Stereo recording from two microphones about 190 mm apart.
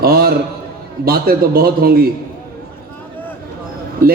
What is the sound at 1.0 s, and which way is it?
Speech, 50° right (ahead or behind).